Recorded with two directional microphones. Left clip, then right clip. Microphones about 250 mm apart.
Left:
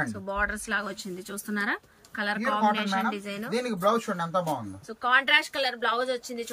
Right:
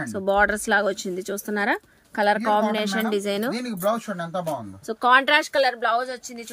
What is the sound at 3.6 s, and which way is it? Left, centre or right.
Speech, centre.